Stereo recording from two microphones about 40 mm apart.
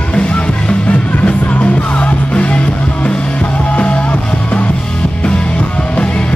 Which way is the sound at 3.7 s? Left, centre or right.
Left.